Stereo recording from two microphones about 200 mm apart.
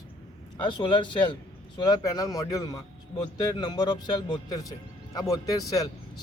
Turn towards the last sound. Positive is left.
turn(degrees=15)  # may be behind; listen again after turning